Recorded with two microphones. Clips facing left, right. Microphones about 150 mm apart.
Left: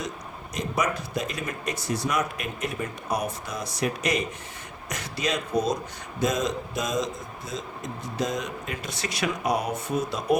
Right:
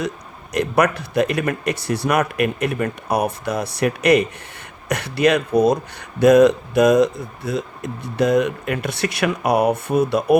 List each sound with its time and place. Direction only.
0.5 s speech: 65° right (ahead or behind)